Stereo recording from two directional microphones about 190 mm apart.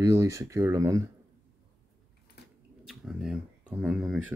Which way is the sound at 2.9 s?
5° right (ahead or behind).